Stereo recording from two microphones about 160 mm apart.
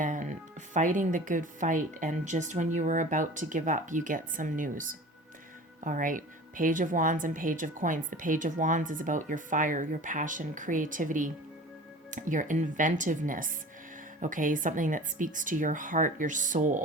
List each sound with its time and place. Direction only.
0.0 s a woman's voice: 50° right (ahead or behind)